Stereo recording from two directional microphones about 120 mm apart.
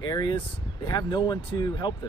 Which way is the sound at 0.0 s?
40° left (ahead or behind).